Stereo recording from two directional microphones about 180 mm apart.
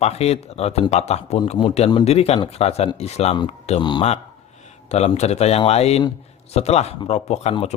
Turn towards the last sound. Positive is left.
turn(degrees=35)  # may be behind; listen again after turning